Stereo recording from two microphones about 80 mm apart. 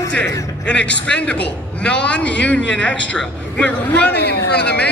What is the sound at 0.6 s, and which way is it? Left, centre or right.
A man's voice, centre.